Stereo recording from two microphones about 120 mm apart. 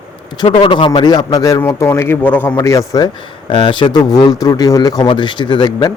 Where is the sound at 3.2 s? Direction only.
45° left (ahead or behind); by 5.0 s 30° left (ahead or behind).